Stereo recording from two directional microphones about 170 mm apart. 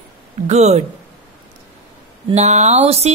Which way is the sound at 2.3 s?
40° right (ahead or behind).